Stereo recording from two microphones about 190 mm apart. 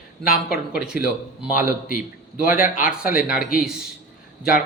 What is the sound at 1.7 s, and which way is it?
A man's voice, 50° left (ahead or behind).